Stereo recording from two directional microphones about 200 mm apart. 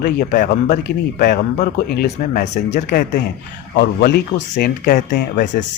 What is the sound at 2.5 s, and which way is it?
Speech, 35° left (ahead or behind).